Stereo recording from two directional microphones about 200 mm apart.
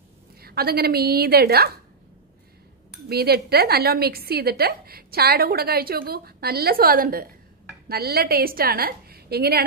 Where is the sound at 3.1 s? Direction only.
50° right (ahead or behind).